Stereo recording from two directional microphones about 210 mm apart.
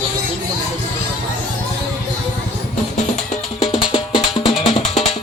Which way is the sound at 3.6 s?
25° left (ahead or behind).